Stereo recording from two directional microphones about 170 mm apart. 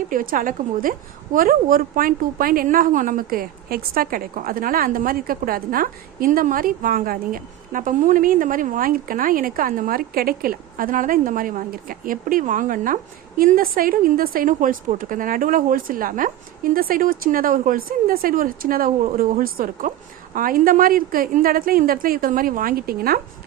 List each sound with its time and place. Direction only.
0.1 s a woman's voice: 55° right (ahead or behind)